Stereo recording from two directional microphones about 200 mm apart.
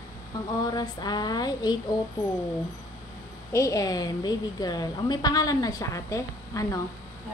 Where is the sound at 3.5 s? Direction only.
15° left (ahead or behind).